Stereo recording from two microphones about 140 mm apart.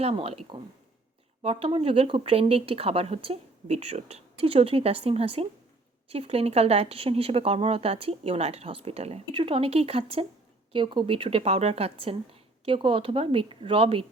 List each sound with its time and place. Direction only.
0.0 s a woman's voice: 45° right (ahead or behind)